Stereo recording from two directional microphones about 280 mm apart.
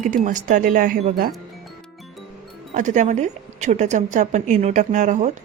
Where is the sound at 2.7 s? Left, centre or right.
Right.